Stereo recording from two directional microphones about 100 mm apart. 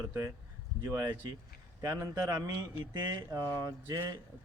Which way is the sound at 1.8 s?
35° right (ahead or behind).